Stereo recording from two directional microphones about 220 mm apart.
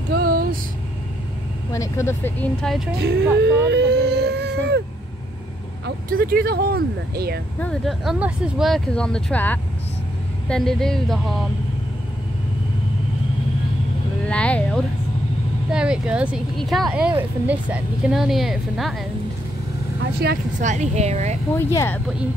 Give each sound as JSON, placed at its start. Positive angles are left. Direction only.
{"t": 0.1, "sound": "vehicle", "side_deg": -45}
{"t": 1.7, "sound": "speech", "side_deg": 15}
{"t": 3.0, "sound": "speech", "side_deg": -50}
{"t": 5.9, "sound": "speech", "side_deg": -40}
{"t": 7.6, "sound": "speech", "side_deg": 0}
{"t": 14.2, "sound": "speech", "side_deg": 5}
{"t": 20.0, "sound": "speech", "side_deg": -45}
{"t": 20.6, "sound": "speech", "side_deg": -30}
{"t": 21.5, "sound": "speech", "side_deg": 10}